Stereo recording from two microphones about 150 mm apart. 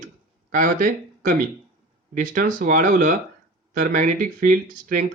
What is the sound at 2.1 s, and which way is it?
Speech, 60° right (ahead or behind).